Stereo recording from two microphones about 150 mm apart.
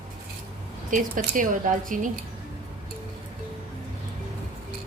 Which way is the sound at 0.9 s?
65° right (ahead or behind).